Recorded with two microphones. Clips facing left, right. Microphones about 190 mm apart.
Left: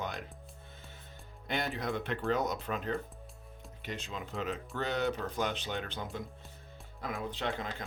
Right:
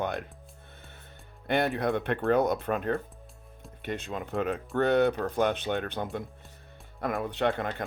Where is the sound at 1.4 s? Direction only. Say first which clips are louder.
Right 8 dB; 60° right (ahead or behind).